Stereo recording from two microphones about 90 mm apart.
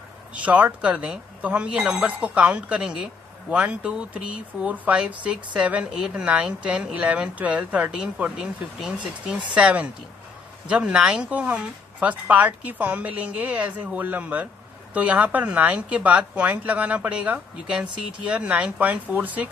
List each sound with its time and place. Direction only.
0.3 s speech: 15° right (ahead or behind)